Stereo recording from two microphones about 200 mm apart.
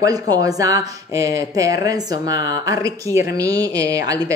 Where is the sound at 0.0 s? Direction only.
20° right (ahead or behind).